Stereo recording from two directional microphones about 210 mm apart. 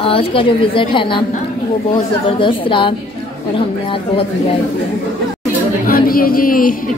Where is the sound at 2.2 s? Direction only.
25° left (ahead or behind).